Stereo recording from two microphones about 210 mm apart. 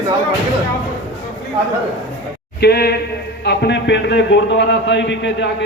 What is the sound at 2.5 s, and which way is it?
A man's voice, 50° left (ahead or behind).